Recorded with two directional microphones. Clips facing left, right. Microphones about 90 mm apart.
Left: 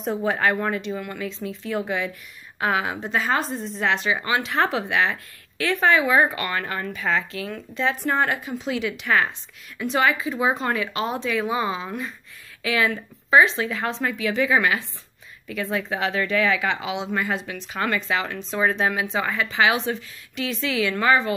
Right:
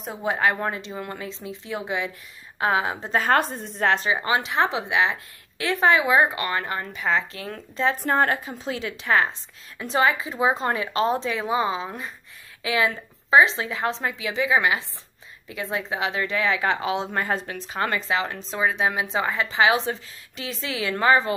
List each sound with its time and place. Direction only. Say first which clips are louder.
0.2 s speech: right 1 dB; 20° right (ahead or behind)
3.2 s a woman's voice: right 3 dB; 50° right (ahead or behind); by 16.6 s 25° right (ahead or behind)
16.8 s speech: right 1 dB; 40° right (ahead or behind)
18.6 s speech: left 1 dB; 10° right (ahead or behind)
18.9 s speech: even; 25° right (ahead or behind)